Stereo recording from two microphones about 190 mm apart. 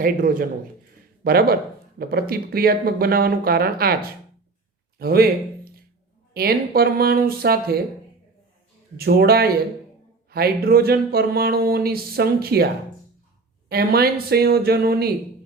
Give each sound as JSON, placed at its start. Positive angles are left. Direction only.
{"t": 0.0, "sound": "speech", "side_deg": -45}
{"t": 4.9, "sound": "a man's voice", "side_deg": -55}
{"t": 9.0, "sound": "speech", "side_deg": -55}
{"t": 13.7, "sound": "speech", "side_deg": -55}